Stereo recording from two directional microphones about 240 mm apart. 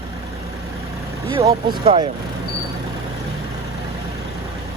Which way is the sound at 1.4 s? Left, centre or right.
Centre.